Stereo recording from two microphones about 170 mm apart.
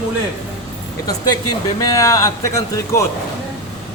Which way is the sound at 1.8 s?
20° left (ahead or behind).